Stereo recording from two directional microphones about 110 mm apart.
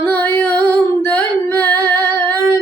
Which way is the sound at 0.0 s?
20° left (ahead or behind).